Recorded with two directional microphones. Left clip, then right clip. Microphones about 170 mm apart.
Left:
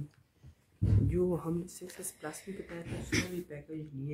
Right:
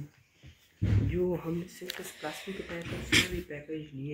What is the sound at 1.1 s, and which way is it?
Speech, 50° left (ahead or behind).